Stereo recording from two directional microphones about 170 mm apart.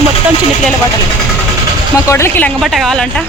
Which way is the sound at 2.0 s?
15° left (ahead or behind).